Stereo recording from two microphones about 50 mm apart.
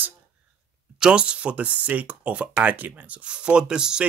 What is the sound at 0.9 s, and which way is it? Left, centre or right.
Speech, centre.